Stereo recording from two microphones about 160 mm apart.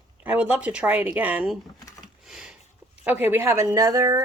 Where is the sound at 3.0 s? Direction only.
10° right (ahead or behind).